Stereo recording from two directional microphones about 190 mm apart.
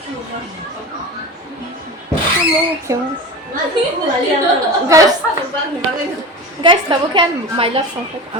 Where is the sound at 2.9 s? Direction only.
15° right (ahead or behind).